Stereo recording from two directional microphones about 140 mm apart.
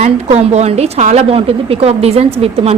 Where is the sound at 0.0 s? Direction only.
50° right (ahead or behind).